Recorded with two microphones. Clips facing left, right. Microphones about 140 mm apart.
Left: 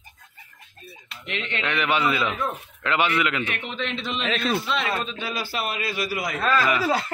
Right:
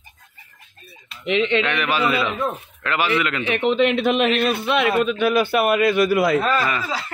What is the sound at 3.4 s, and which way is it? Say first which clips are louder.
A man's voice: right 13 dB; 80° right.